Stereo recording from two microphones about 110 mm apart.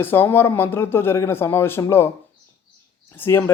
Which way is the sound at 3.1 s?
20° left (ahead or behind).